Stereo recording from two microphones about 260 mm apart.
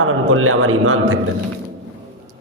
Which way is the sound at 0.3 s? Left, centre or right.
Right.